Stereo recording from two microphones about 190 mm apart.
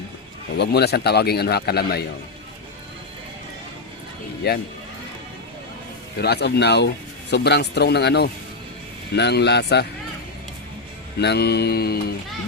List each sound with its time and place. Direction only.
0.5 s speech: 60° left (ahead or behind)
4.4 s speech: 60° left (ahead or behind)
6.1 s speech: 60° left (ahead or behind)
11.2 s speech: 60° left (ahead or behind)